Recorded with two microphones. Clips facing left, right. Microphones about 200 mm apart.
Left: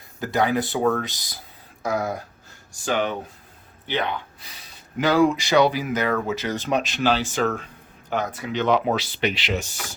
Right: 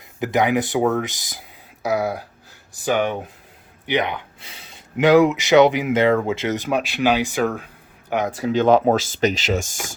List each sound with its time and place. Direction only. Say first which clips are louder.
0.2 s speech: right 3 dB; 20° right (ahead or behind)
1.8 s speech: right 3 dB; 5° right (ahead or behind)
3.8 s speech: right 4 dB; 15° right (ahead or behind)
6.6 s speech: right 2 dB; 10° right (ahead or behind)
8.5 s speech: right 5 dB; 45° right (ahead or behind)